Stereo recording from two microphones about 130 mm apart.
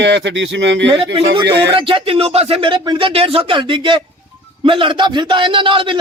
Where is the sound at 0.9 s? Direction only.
40° right (ahead or behind).